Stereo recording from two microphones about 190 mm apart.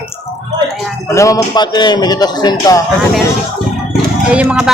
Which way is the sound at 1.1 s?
15° left (ahead or behind).